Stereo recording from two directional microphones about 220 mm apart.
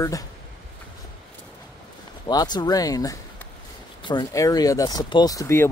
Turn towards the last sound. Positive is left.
turn(degrees=15)  # may be behind; listen again after turning